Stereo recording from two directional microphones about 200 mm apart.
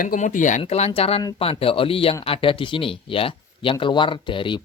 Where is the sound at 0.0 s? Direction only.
40° left (ahead or behind).